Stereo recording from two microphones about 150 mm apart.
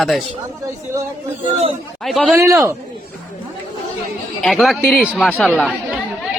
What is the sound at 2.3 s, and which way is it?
Speech, 20° right (ahead or behind).